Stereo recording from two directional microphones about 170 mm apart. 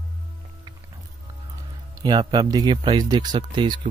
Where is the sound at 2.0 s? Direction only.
25° right (ahead or behind).